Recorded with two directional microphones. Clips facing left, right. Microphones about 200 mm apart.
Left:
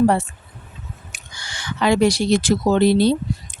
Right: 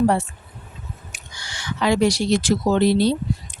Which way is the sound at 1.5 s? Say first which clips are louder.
Left 2 dB; 55° left (ahead or behind).